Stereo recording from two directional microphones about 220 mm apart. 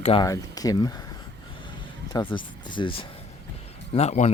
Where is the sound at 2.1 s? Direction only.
20° left (ahead or behind).